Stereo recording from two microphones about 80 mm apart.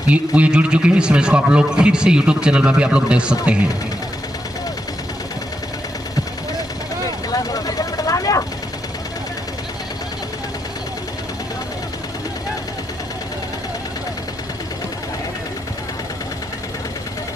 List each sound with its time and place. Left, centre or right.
0.1 s a man's voice: centre
7.2 s vehicle: left